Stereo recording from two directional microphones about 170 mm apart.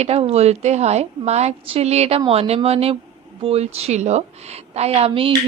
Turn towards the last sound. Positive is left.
turn(degrees=-35)  # may be behind; listen again after turning